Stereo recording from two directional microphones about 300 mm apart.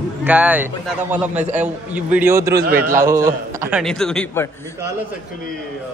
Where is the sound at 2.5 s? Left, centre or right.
Right.